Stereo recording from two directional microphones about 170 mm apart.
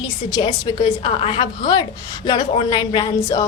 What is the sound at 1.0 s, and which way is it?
A woman's voice, 35° left (ahead or behind).